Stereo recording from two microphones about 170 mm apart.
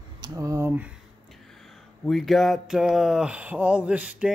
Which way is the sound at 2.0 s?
Centre (ahead or behind).